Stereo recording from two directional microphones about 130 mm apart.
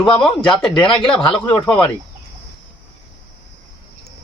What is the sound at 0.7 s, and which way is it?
Speech, 40° left (ahead or behind).